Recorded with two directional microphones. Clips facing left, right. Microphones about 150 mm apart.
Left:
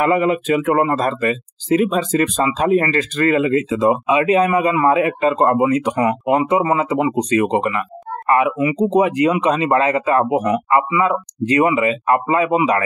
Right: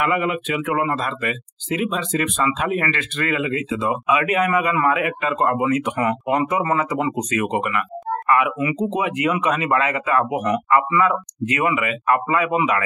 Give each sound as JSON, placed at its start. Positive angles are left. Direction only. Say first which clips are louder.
{"t": 0.0, "sound": "speech", "louder": "left 5 dB", "side_deg": 35}